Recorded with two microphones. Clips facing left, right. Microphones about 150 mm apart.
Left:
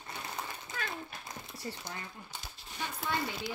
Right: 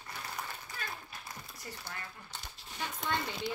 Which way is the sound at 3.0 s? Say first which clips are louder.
Even; 5° left (ahead or behind).